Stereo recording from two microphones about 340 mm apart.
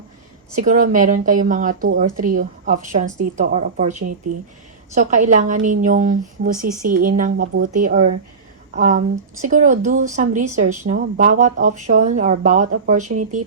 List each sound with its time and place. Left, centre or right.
0.5 s speech: right